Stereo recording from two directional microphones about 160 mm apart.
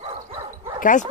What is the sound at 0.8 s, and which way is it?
Speech, 50° left (ahead or behind).